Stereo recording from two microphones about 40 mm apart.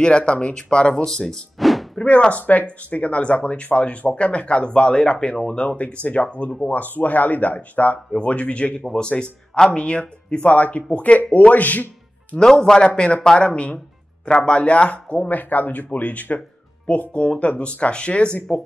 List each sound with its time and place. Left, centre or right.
0.0 s speech: left
1.6 s music: centre
2.0 s speech: left
6.0 s speech: left
12.6 s speech: left
15.2 s speech: left